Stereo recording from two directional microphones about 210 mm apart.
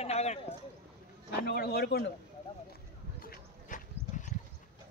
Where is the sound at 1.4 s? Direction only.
50° left (ahead or behind).